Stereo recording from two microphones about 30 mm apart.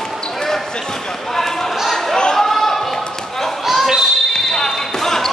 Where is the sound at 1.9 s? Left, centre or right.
Centre.